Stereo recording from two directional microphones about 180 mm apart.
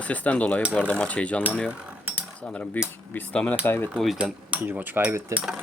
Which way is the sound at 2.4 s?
5° left (ahead or behind).